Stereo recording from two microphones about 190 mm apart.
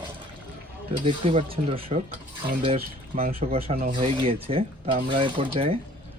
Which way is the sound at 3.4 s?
30° right (ahead or behind).